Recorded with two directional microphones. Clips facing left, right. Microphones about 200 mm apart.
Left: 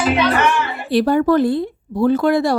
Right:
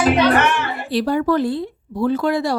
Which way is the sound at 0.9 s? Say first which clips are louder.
Left 4 dB; 50° left (ahead or behind).